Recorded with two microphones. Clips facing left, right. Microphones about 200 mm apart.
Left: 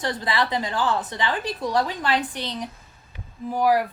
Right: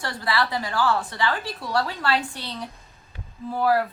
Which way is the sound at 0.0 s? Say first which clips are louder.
Left 1 dB; 20° left (ahead or behind).